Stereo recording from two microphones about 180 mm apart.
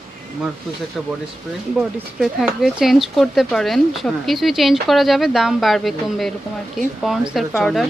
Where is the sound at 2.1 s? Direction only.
5° right (ahead or behind).